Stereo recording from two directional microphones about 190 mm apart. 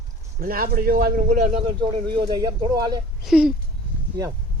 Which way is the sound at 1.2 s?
40° right (ahead or behind).